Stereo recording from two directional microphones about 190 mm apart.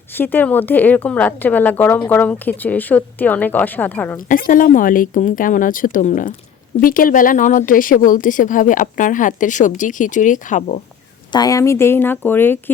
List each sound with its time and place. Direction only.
0.2 s a woman's voice: 10° left (ahead or behind)
4.3 s a woman's voice: 45° left (ahead or behind)
11.3 s a woman's voice: 20° left (ahead or behind)